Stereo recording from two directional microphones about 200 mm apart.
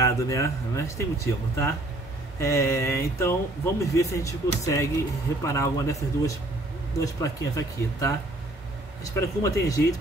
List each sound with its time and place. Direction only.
0.0 s speech: 15° left (ahead or behind)